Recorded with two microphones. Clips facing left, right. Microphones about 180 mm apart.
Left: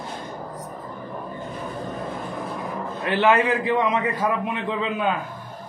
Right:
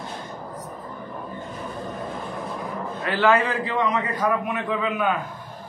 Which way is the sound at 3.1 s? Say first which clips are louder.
Left 1 dB; 20° left (ahead or behind).